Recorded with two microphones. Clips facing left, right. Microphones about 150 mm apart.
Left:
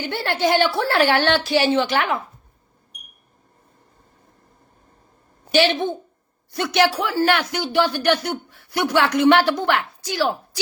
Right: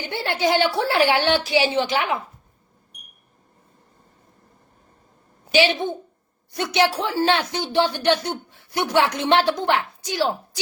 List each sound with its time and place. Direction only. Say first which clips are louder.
0.0 s a woman's voice: left 1 dB; 15° right (ahead or behind)
6.5 s speech: left 1 dB; 20° right (ahead or behind)